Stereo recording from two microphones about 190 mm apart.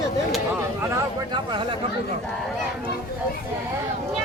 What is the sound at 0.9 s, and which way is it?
Speech, 25° right (ahead or behind).